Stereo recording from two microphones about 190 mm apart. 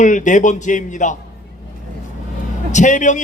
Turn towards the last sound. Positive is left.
turn(degrees=40)  # may be behind; listen again after turning